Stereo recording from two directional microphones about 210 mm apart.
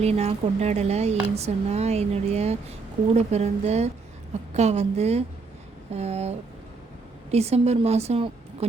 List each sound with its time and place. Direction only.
0.0 s a woman's voice: 30° right (ahead or behind)